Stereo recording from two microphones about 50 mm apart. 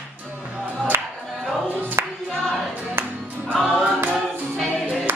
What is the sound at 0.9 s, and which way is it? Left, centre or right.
Music, right.